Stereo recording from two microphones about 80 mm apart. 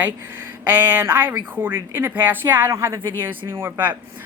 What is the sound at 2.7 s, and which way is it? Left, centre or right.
Speech, right.